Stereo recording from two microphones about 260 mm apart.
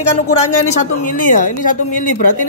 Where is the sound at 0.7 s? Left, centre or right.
Left.